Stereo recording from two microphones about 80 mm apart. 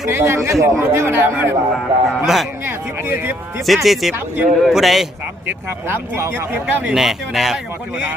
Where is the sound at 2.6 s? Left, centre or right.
Right.